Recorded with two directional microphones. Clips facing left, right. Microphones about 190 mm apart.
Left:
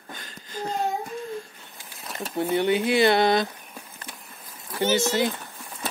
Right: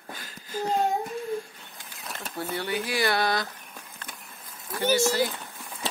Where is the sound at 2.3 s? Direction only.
20° left (ahead or behind).